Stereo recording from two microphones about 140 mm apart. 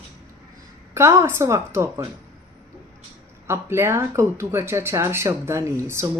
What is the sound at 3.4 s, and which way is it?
A woman's voice, 20° right (ahead or behind).